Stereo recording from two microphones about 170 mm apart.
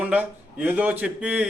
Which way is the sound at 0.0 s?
10° right (ahead or behind).